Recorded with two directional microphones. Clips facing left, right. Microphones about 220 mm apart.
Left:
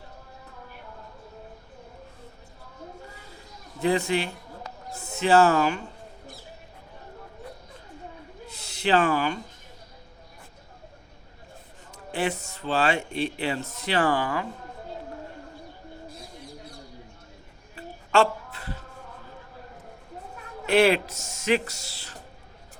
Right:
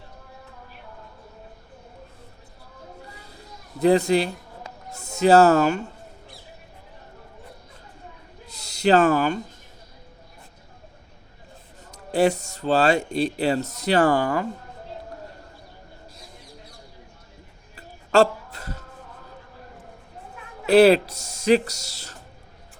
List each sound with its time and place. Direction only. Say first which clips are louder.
3.8 s speech: right 6 dB; 40° right (ahead or behind)
8.4 s a sound: right 6 dB; 40° right (ahead or behind)
11.9 s speech: right 8 dB; 40° right (ahead or behind)
17.7 s music: right 4 dB; 40° right (ahead or behind)
20.7 s speech: right 6 dB; 35° right (ahead or behind)